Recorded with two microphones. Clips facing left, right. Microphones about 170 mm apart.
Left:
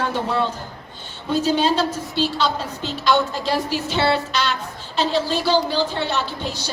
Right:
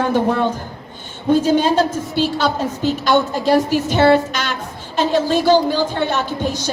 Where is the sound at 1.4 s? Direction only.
50° right (ahead or behind).